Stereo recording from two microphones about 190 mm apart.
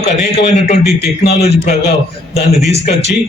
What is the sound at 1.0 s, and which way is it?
Speech, 55° left (ahead or behind).